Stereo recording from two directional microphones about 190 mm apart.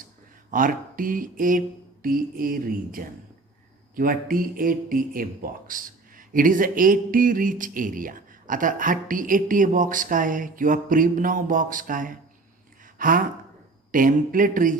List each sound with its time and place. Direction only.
0.5 s speech: 45° right (ahead or behind)
12.8 s a sound: 45° right (ahead or behind)
13.9 s speech: 45° right (ahead or behind)